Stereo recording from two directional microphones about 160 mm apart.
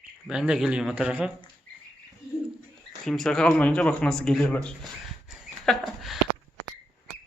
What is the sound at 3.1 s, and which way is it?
Speech, 5° left (ahead or behind).